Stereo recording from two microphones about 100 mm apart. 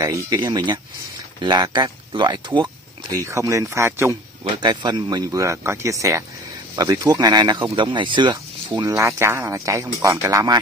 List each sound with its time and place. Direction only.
0.0 s speech: 40° right (ahead or behind)
3.1 s speech: 30° right (ahead or behind)
4.6 s speech: 50° right (ahead or behind)
8.8 s speech: 30° right (ahead or behind)